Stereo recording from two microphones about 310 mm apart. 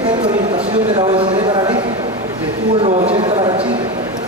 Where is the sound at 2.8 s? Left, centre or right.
Centre.